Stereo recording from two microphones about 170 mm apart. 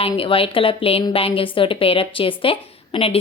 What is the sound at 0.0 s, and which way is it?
A woman's voice, 30° left (ahead or behind).